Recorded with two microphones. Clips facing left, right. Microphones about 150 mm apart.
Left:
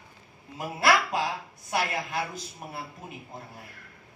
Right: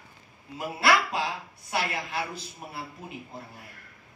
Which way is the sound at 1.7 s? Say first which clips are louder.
Left 1 dB; 50° left (ahead or behind).